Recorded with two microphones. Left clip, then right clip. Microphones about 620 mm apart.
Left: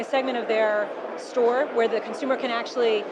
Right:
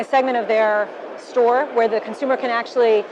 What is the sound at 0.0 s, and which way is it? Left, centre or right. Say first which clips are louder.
A woman's voice: right 7 dB; right.